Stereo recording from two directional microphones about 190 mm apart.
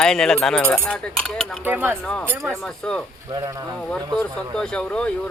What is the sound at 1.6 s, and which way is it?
Speech, 10° right (ahead or behind).